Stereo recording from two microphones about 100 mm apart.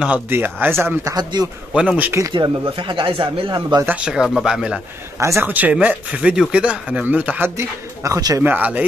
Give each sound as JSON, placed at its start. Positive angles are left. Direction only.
{"t": 0.0, "sound": "speech", "side_deg": -15}
{"t": 1.1, "sound": "a man's voice", "side_deg": -45}
{"t": 1.7, "sound": "speech", "side_deg": -10}
{"t": 2.3, "sound": "a man's voice", "side_deg": -40}
{"t": 2.7, "sound": "speech", "side_deg": -55}
{"t": 3.8, "sound": "speech", "side_deg": -10}
{"t": 5.2, "sound": "speech", "side_deg": -30}
{"t": 5.5, "sound": "speech", "side_deg": -15}
{"t": 8.0, "sound": "speech", "side_deg": -35}
{"t": 8.5, "sound": "speech", "side_deg": -15}